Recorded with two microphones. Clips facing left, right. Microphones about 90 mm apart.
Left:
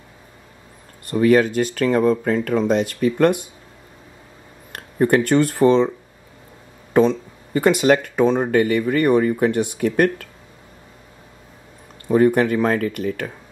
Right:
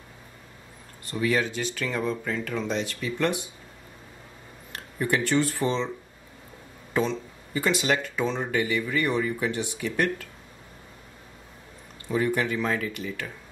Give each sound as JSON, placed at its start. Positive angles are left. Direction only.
{"t": 1.0, "sound": "speech", "side_deg": 50}
{"t": 4.7, "sound": "speech", "side_deg": 50}
{"t": 6.9, "sound": "speech", "side_deg": 50}
{"t": 12.1, "sound": "speech", "side_deg": 50}